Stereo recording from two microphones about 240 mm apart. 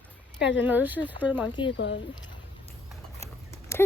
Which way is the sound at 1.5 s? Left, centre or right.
Centre.